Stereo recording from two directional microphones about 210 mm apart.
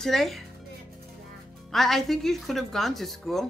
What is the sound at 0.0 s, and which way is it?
Speech, centre (ahead or behind).